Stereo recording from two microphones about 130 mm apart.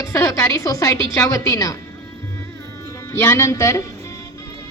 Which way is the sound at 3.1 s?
20° left (ahead or behind).